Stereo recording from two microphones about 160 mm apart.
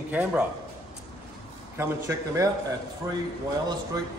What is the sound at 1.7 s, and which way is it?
Speech, 20° right (ahead or behind).